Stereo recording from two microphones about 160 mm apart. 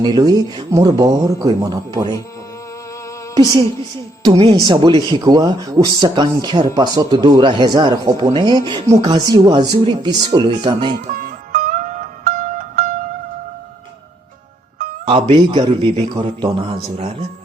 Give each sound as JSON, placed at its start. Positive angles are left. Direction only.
{"t": 0.0, "sound": "speech", "side_deg": -25}
{"t": 4.5, "sound": "speech", "side_deg": -25}
{"t": 11.0, "sound": "music", "side_deg": -60}
{"t": 15.0, "sound": "a man's voice", "side_deg": -35}